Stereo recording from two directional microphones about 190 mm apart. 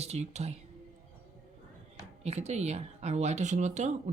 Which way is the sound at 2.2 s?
35° right (ahead or behind).